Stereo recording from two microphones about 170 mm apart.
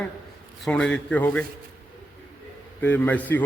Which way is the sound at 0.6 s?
5° left (ahead or behind).